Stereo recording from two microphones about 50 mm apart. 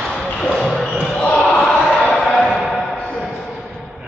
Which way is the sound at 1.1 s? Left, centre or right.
Left.